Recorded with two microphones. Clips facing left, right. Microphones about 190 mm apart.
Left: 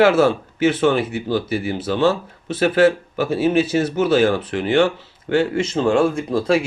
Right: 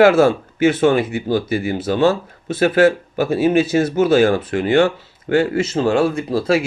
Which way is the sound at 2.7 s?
45° right (ahead or behind).